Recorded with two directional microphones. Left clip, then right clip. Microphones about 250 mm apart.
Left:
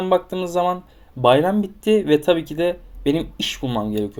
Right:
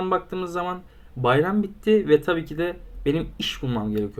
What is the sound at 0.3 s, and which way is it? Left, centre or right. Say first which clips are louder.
Speech: left 7 dB; centre.